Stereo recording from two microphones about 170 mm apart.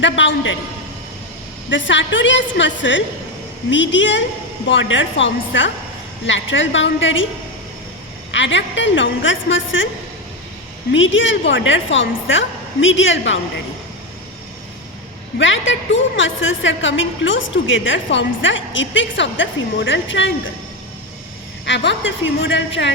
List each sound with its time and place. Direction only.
0.0 s a woman's voice: 90° left
1.7 s a woman's voice: 90° left
8.3 s a woman's voice: 90° left
10.9 s a woman's voice: 90° left
15.4 s a woman's voice: 90° left
21.7 s a woman's voice: 90° left